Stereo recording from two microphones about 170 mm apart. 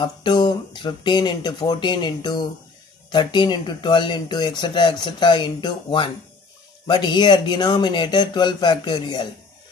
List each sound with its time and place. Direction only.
0.0 s speech: 25° left (ahead or behind)